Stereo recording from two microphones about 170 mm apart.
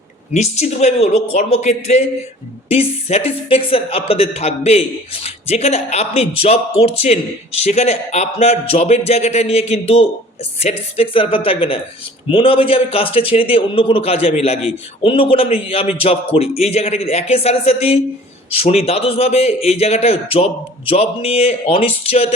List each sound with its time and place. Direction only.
0.3 s speech: 40° left (ahead or behind)